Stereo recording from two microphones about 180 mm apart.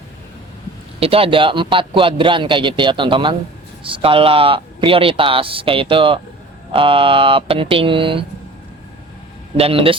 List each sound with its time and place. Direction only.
0.9 s a man's voice: 30° right (ahead or behind)
9.6 s speech: 30° right (ahead or behind)